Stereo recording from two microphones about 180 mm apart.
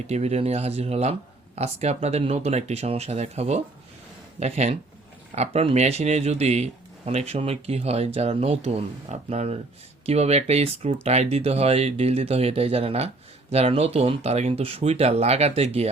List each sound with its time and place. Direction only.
0.1 s speech: 35° right (ahead or behind)